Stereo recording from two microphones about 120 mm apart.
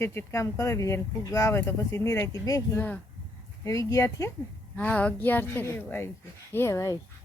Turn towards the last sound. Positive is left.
turn(degrees=25)  # may be behind; listen again after turning